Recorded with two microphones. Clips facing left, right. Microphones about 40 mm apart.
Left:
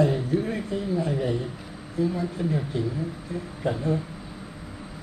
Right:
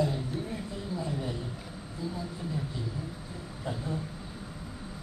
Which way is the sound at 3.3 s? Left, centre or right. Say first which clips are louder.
Left 10 dB; left.